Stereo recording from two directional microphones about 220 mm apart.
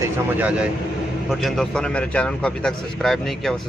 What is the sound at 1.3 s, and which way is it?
A man's voice, centre (ahead or behind).